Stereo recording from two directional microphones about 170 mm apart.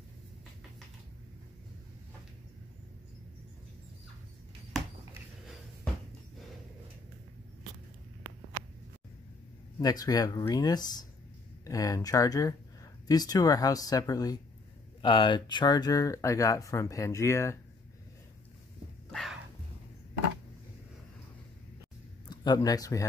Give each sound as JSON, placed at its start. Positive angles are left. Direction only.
{"t": 9.8, "sound": "speech", "side_deg": 20}
{"t": 19.1, "sound": "music", "side_deg": 0}
{"t": 22.3, "sound": "speech", "side_deg": 25}